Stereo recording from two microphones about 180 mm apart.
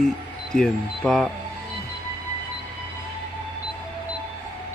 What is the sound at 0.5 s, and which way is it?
Speech, 5° left (ahead or behind).